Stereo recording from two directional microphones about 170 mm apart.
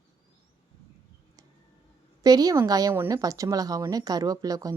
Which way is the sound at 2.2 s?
20° right (ahead or behind).